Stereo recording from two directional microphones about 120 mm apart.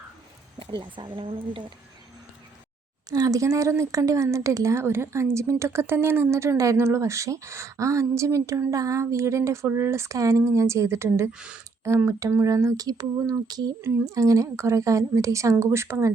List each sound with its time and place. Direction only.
0.6 s speech: 40° right (ahead or behind)
3.1 s speech: 30° right (ahead or behind)
11.3 s speech: 10° right (ahead or behind)
11.8 s speech: 20° right (ahead or behind)